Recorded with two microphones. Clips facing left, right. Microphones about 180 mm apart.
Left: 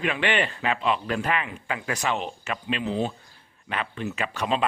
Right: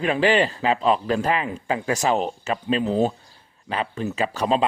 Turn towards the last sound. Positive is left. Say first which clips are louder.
# right 5 dB
turn(degrees=-35)  # may be behind; listen again after turning